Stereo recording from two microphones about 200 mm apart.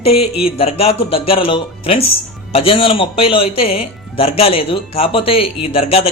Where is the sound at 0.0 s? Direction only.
30° left (ahead or behind).